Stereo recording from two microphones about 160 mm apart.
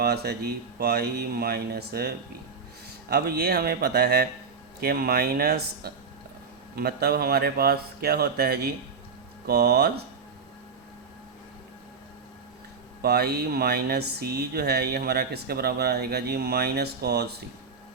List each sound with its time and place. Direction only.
0.0 s a man's voice: 90° right
9.5 s speech: 90° right
13.0 s speech: 80° right